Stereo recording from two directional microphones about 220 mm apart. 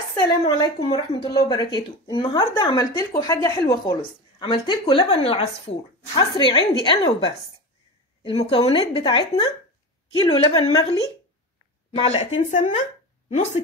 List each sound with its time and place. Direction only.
0.1 s speech: 20° left (ahead or behind)